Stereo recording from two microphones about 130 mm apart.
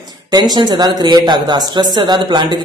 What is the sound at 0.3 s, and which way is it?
Speech, 30° right (ahead or behind).